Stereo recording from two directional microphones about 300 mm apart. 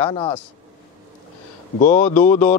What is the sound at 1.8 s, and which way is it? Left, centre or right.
Speech, left.